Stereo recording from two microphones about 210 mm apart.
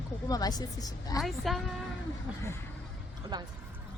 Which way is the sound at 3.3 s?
20° right (ahead or behind).